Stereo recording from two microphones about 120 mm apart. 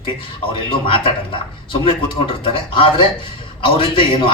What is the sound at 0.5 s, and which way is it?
Speech, 45° left (ahead or behind).